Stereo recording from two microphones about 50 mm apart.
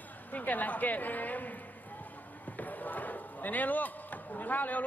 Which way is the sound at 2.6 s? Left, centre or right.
Left.